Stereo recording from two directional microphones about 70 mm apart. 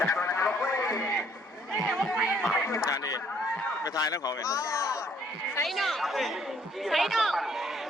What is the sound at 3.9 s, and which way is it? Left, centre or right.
Speech, left.